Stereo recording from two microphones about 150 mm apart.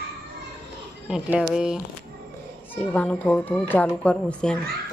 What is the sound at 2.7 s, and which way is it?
A woman's voice, 10° left (ahead or behind).